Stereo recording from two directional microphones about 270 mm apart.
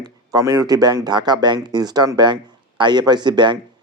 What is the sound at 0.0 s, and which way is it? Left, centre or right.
Speech, centre.